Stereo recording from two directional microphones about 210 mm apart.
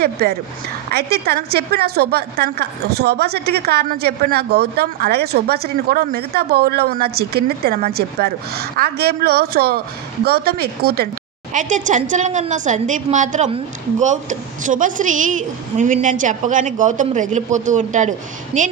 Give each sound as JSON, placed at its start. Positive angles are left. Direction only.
{"t": 0.0, "sound": "a woman's voice", "side_deg": -50}
{"t": 11.5, "sound": "a woman's voice", "side_deg": -35}